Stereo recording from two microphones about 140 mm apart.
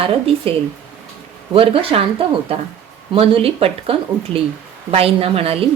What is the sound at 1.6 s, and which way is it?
A woman's voice, 40° right (ahead or behind).